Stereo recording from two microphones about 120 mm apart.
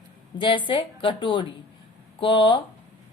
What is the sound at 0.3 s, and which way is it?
Speech, 45° left (ahead or behind).